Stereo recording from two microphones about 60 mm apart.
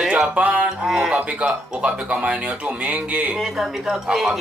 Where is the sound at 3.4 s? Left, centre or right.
Centre.